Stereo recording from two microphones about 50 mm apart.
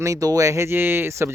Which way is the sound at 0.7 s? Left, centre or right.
Right.